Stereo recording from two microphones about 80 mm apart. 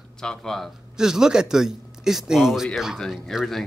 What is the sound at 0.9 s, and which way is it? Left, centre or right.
Speech, centre.